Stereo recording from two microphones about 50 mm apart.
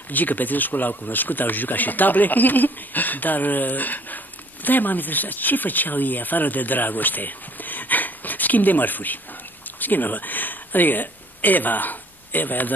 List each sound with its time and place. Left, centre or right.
0.1 s speech: left